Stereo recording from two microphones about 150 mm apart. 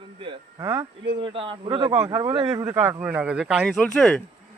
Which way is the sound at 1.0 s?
35° right (ahead or behind).